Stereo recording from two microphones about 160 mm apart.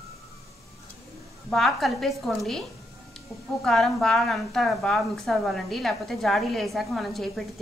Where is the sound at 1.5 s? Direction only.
Centre (ahead or behind).